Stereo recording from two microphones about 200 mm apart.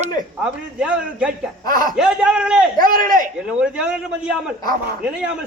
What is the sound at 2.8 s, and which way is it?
Speech, 45° right (ahead or behind).